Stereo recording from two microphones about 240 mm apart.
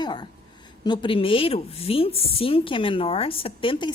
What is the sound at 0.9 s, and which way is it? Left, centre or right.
A woman's voice, left.